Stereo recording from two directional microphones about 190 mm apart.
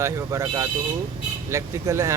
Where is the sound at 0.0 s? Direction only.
15° right (ahead or behind).